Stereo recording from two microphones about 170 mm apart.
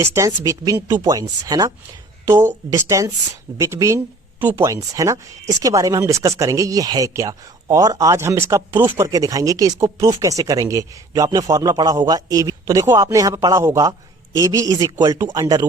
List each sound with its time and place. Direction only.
0.0 s speech: 15° right (ahead or behind)